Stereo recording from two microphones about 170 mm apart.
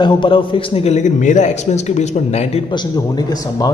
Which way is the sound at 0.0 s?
30° left (ahead or behind).